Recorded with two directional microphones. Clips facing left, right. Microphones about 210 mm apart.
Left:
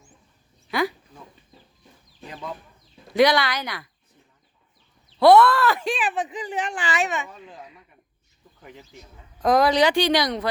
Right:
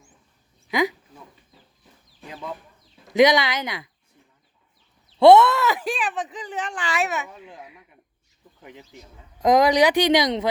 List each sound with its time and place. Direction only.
0.7 s speech: 15° right (ahead or behind)
2.2 s chicken: 5° right (ahead or behind)
3.1 s speech: 20° right (ahead or behind)
5.2 s speech: 25° right (ahead or behind)
5.8 s speech: centre (ahead or behind)
6.8 s speech: centre (ahead or behind); by 10.5 s 20° right (ahead or behind)